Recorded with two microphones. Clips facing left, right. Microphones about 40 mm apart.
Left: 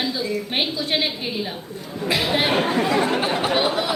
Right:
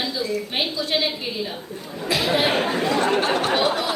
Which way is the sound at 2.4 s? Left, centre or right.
Centre.